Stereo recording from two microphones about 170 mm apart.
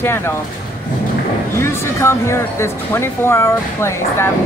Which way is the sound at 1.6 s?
15° left (ahead or behind).